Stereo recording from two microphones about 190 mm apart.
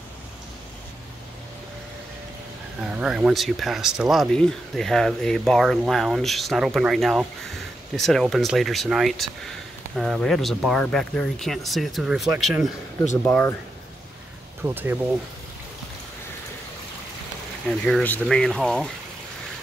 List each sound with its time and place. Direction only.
2.8 s speech: 5° right (ahead or behind)
13.2 s speech: 10° left (ahead or behind)
14.6 s speech: 10° right (ahead or behind)
17.6 s speech: 5° left (ahead or behind)